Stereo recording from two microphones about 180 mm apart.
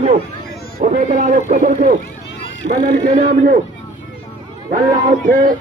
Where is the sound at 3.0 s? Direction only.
40° right (ahead or behind).